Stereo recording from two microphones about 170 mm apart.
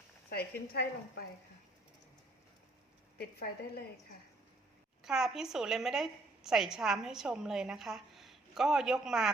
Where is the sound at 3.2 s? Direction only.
65° left (ahead or behind).